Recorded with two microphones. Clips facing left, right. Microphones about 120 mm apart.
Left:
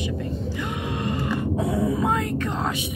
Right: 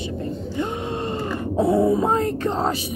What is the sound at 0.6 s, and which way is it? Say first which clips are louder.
Speech: right 5 dB; 30° right (ahead or behind).